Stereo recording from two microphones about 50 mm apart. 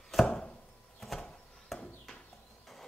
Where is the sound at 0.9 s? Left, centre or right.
Centre.